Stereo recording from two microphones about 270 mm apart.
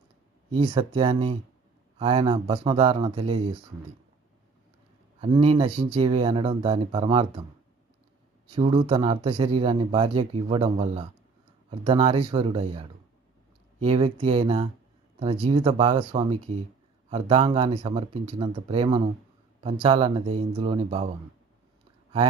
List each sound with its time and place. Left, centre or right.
0.6 s speech: centre
5.2 s speech: right
8.5 s speech: centre